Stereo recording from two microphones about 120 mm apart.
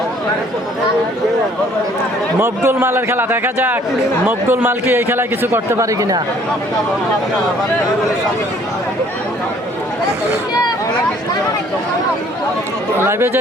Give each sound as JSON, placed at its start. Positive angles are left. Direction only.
{"t": 2.4, "sound": "a man's voice", "side_deg": -20}
{"t": 13.0, "sound": "a man's voice", "side_deg": -20}